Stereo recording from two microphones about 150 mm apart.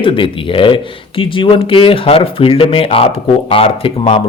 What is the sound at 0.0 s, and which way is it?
Speech, 35° left (ahead or behind).